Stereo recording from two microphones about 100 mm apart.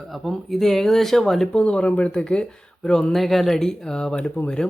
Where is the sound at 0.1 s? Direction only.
Centre (ahead or behind).